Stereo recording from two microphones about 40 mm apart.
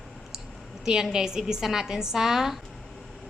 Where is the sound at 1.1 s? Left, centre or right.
Centre.